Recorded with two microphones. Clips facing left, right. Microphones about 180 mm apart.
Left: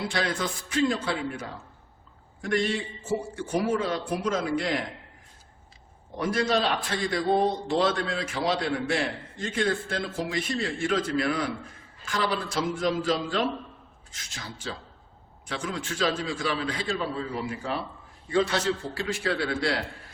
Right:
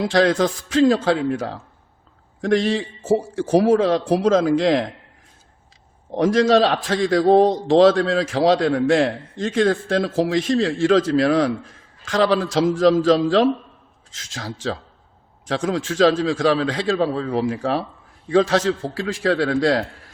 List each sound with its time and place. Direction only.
0.0 s a man's voice: 90° right
6.1 s a man's voice: 90° right